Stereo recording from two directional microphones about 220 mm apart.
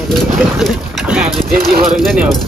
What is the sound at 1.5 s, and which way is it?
Speech, 40° right (ahead or behind).